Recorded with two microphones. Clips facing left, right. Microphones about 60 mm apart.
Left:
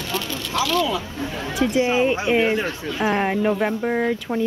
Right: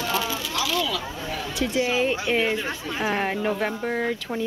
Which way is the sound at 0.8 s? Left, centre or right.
Left.